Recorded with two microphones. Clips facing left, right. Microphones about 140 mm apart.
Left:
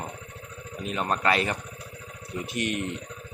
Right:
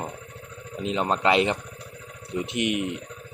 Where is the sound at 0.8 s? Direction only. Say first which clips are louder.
Right 3 dB; 20° right (ahead or behind).